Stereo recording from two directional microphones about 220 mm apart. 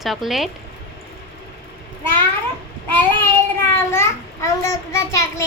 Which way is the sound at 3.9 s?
10° left (ahead or behind).